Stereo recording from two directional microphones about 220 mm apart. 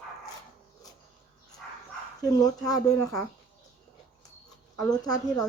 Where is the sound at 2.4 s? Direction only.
15° left (ahead or behind).